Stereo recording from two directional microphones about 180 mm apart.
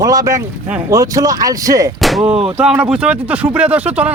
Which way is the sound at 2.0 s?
Centre (ahead or behind).